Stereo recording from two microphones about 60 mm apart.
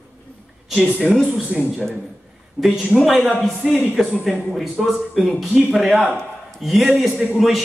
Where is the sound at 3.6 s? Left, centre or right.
Centre.